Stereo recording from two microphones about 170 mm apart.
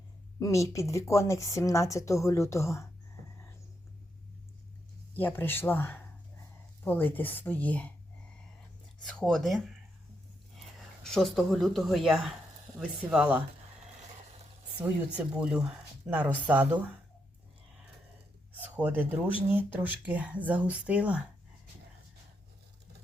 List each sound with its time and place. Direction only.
0.3 s speech: 20° left (ahead or behind)
5.1 s speech: 10° left (ahead or behind)
9.0 s speech: 5° left (ahead or behind)
11.0 s speech: centre (ahead or behind)
14.8 s speech: 15° right (ahead or behind)
18.6 s speech: 10° right (ahead or behind)